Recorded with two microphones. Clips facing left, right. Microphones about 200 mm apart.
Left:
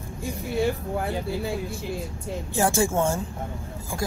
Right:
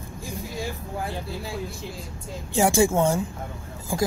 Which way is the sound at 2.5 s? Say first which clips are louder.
Right 3 dB; 15° right (ahead or behind).